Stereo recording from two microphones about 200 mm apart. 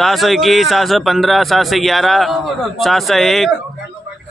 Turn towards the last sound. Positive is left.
turn(degrees=0)  # may be behind; listen again after turning